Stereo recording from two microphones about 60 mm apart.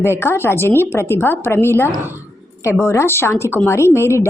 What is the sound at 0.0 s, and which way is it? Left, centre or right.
A woman's voice, left.